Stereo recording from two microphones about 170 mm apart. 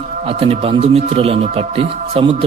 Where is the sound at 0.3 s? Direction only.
35° right (ahead or behind).